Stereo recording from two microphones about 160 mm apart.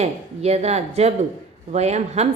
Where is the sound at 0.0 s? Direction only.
40° right (ahead or behind).